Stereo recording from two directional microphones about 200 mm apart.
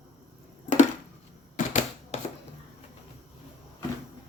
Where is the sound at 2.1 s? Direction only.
35° left (ahead or behind).